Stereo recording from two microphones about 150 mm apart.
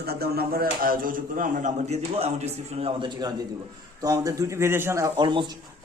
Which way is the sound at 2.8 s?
30° right (ahead or behind).